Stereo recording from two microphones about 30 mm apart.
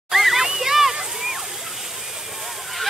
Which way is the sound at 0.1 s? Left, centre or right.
Centre.